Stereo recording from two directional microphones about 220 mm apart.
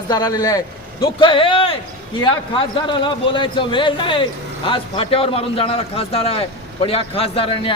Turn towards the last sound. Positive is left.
turn(degrees=25)  # may be behind; listen again after turning